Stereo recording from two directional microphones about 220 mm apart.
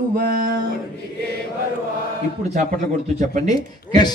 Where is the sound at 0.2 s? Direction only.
45° right (ahead or behind).